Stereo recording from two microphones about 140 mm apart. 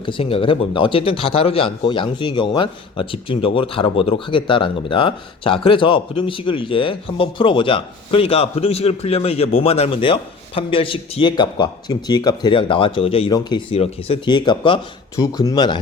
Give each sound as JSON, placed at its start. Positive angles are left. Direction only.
{"t": 0.0, "sound": "a man's voice", "side_deg": 40}
{"t": 13.3, "sound": "a man's voice", "side_deg": 30}
{"t": 13.7, "sound": "a man's voice", "side_deg": 45}